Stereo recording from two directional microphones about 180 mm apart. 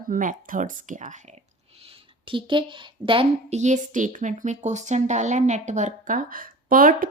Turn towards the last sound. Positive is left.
turn(degrees=-50)  # may be behind; listen again after turning